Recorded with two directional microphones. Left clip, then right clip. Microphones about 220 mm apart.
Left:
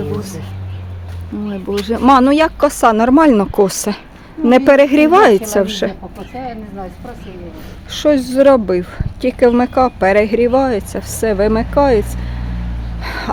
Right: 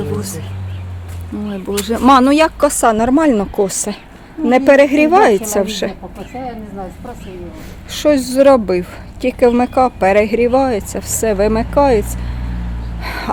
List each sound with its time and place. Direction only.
0.2 s speech: 10° left (ahead or behind)
1.8 s a woman's voice: 5° left (ahead or behind)
7.9 s speech: 10° left (ahead or behind)
13.0 s a sound: 10° left (ahead or behind)